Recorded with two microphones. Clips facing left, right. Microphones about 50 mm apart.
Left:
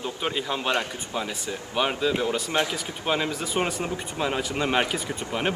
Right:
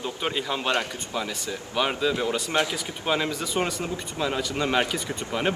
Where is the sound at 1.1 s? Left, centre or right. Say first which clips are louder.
Even; centre.